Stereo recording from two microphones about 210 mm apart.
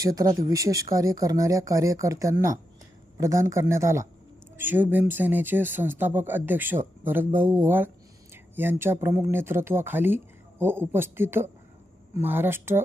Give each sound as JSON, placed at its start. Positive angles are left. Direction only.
{"t": 0.0, "sound": "speech", "side_deg": -15}